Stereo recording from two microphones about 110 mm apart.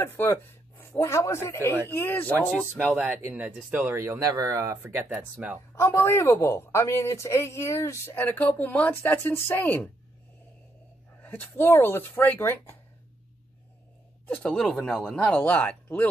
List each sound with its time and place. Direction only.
0.0 s speech: 20° left (ahead or behind)
2.8 s speech: 15° right (ahead or behind)
5.1 s speech: 10° right (ahead or behind)
5.8 s speech: 20° left (ahead or behind)
11.2 s speech: 20° left (ahead or behind)
14.2 s speech: 10° left (ahead or behind)